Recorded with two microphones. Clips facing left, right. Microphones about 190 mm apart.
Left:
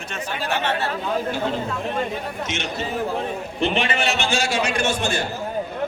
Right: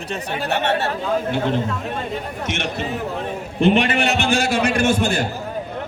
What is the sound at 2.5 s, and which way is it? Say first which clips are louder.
Speech: right 5 dB; 60° right (ahead or behind).